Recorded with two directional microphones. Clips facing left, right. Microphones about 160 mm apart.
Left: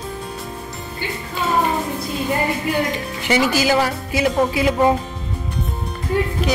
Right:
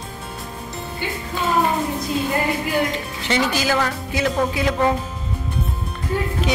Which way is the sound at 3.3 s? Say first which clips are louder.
Left 3 dB; 10° left (ahead or behind).